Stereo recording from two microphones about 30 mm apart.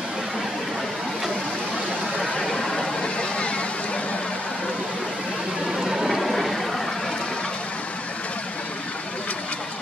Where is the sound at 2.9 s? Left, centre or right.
Left.